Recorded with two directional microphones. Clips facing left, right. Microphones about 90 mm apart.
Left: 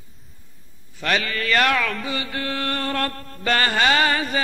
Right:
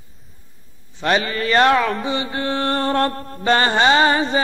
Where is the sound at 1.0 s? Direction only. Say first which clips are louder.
Right 4 dB; 30° right (ahead or behind).